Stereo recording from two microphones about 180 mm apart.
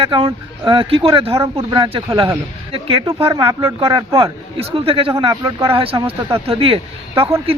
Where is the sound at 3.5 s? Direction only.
15° right (ahead or behind).